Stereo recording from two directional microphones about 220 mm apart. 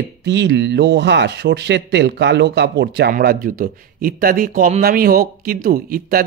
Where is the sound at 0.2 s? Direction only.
55° right (ahead or behind).